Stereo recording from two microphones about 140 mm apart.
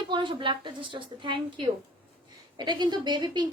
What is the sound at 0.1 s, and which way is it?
A woman's voice, 35° right (ahead or behind).